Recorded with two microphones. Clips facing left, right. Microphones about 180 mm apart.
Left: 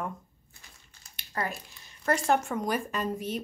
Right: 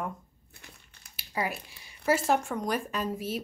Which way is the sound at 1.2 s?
10° right (ahead or behind).